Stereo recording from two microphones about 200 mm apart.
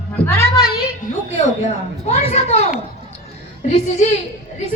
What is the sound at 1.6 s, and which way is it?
A woman's voice, 30° left (ahead or behind).